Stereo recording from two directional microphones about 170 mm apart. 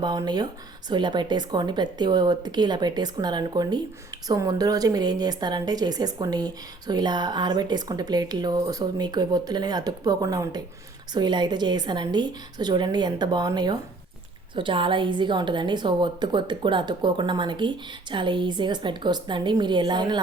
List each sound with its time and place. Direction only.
0.0 s a woman's voice: 25° right (ahead or behind)